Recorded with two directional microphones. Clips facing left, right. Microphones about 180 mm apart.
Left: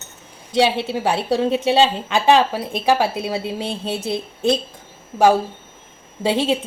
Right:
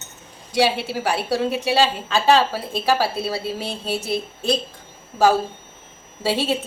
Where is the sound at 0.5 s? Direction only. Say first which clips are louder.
Left 2 dB; 25° left (ahead or behind).